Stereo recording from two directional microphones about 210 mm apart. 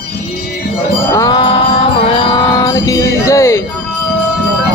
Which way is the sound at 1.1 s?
15° left (ahead or behind).